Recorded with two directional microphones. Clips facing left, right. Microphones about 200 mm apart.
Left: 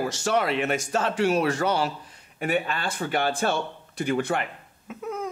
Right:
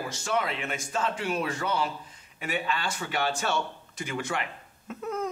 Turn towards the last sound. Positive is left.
turn(degrees=5)  # may be behind; listen again after turning